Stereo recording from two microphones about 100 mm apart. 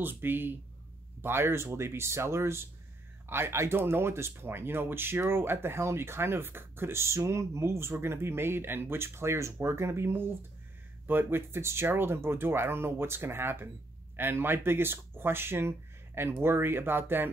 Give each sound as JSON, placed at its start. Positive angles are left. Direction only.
{"t": 0.0, "sound": "speech", "side_deg": -20}